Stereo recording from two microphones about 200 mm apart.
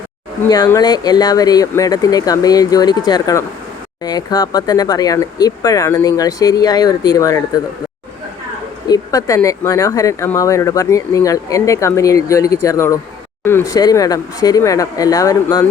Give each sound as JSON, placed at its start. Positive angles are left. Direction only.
{"t": 0.5, "sound": "speech", "side_deg": 20}
{"t": 8.9, "sound": "speech", "side_deg": 15}